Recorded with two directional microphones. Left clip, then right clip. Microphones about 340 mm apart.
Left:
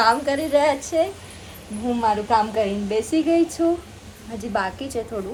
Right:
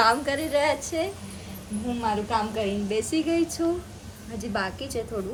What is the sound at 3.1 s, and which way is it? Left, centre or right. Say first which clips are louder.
A woman's voice: left 8 dB; centre.